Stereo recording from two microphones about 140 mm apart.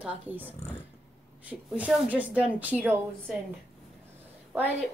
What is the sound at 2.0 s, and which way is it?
A woman's voice, 10° right (ahead or behind).